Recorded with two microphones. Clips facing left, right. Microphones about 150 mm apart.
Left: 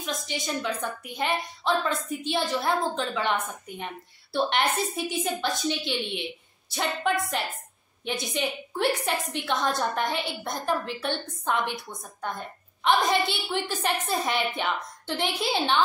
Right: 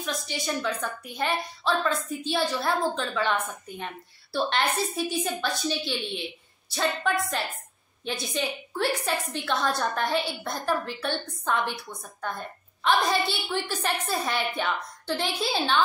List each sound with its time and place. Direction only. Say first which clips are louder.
0.0 s a woman's voice: right 1 dB; 20° left (ahead or behind)